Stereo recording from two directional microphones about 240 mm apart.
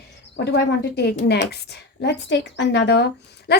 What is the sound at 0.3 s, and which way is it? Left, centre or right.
A woman's voice, left.